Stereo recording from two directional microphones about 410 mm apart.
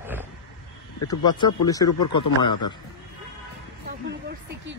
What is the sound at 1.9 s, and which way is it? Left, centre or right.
Speech, left.